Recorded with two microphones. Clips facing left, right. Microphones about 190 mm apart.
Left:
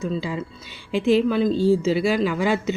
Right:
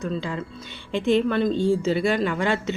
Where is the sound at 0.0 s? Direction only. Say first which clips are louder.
Left 2 dB; 5° left (ahead or behind).